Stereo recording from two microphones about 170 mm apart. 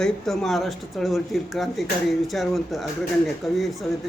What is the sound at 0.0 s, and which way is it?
Speech, centre (ahead or behind).